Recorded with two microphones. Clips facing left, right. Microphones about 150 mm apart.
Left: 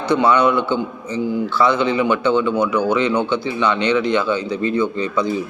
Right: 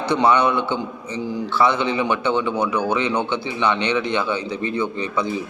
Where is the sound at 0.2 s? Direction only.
20° right (ahead or behind).